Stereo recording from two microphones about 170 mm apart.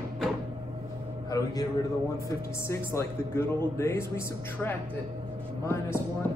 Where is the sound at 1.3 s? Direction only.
20° left (ahead or behind).